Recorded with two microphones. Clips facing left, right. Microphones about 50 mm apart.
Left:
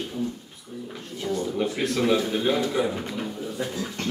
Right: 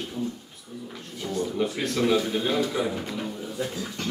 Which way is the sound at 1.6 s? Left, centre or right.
Centre.